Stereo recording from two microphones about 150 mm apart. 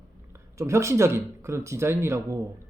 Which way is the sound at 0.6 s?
20° right (ahead or behind).